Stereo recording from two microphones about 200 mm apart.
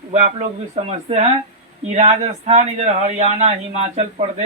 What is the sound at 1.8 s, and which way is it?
A man's voice, 35° right (ahead or behind).